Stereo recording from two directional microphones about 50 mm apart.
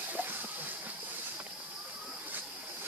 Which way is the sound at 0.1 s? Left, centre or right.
Right.